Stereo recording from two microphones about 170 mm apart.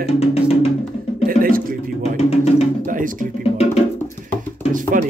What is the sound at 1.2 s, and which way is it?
Music, 55° right (ahead or behind).